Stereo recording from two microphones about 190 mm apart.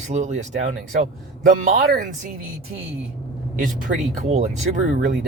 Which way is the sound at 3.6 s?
40° right (ahead or behind).